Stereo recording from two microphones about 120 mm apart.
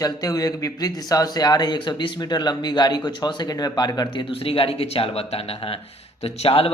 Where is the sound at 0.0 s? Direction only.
30° left (ahead or behind).